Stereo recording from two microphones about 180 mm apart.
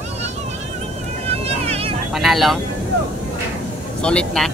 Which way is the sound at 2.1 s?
Centre (ahead or behind).